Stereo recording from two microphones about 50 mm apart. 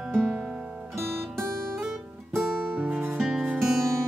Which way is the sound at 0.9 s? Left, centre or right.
Right.